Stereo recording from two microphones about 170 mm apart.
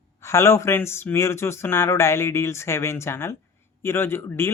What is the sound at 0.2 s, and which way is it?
Speech, 15° left (ahead or behind).